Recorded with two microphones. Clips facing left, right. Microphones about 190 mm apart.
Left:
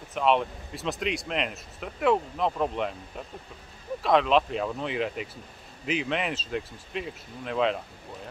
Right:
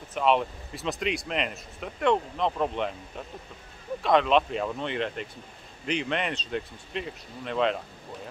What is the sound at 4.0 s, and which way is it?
Speech, centre (ahead or behind).